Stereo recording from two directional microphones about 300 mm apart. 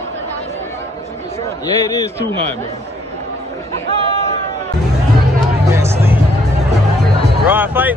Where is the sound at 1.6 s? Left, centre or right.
Centre.